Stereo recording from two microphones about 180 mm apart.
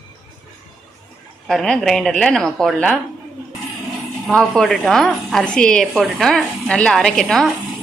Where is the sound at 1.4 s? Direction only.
Centre (ahead or behind).